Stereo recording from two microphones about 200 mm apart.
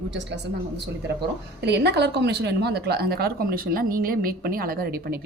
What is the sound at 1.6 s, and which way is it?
A woman's voice, 55° right (ahead or behind).